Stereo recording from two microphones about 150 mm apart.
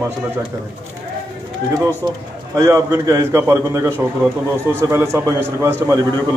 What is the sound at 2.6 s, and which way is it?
A man's voice, 20° right (ahead or behind).